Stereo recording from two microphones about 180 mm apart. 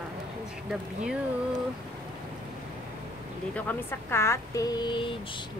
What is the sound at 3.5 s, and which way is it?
Speech, 10° left (ahead or behind).